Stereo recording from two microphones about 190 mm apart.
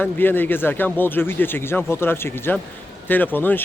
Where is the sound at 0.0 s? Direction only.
10° left (ahead or behind).